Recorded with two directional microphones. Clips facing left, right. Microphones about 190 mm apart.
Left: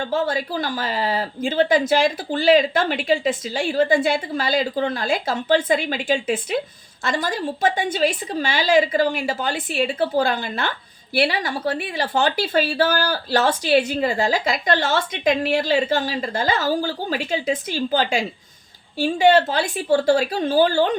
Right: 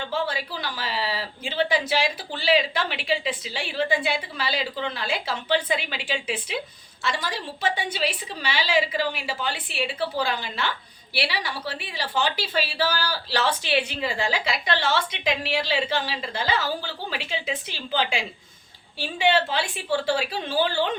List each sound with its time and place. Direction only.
0.0 s a woman's voice: 45° left (ahead or behind)